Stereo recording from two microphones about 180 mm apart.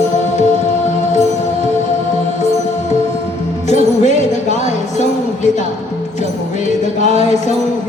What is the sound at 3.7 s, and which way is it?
Music, 40° left (ahead or behind).